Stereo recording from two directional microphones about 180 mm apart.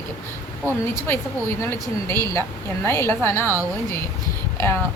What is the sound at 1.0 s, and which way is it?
Speech, 15° left (ahead or behind).